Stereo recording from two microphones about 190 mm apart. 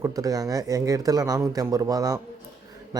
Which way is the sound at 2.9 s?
20° right (ahead or behind).